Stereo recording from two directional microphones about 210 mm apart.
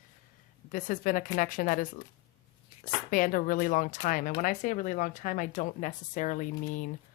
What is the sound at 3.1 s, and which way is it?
Speech, 40° left (ahead or behind).